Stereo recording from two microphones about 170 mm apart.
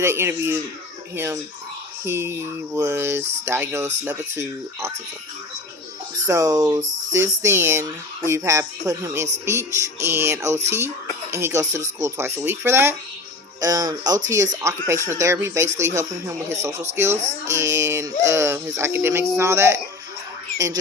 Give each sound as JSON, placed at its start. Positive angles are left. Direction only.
{"t": 0.0, "sound": "speech", "side_deg": -15}
{"t": 6.2, "sound": "speech", "side_deg": -20}